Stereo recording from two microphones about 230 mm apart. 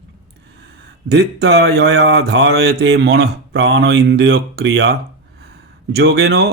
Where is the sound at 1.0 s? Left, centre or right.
Right.